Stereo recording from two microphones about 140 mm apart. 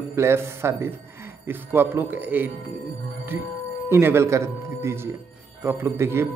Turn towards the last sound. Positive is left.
turn(degrees=-15)  # may be behind; listen again after turning